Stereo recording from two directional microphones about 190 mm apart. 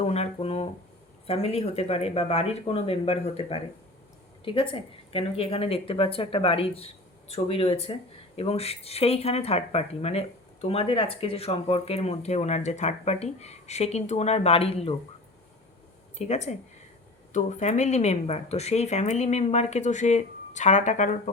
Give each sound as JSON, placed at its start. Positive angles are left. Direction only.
{"t": 0.0, "sound": "a woman's voice", "side_deg": 35}
{"t": 16.1, "sound": "speech", "side_deg": 35}